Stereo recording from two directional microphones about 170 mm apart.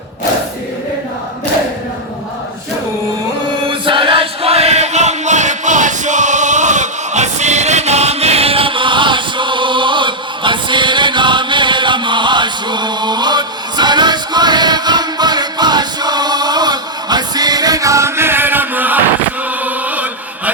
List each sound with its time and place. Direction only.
3.7 s chant: 30° right (ahead or behind); by 20.5 s 10° right (ahead or behind)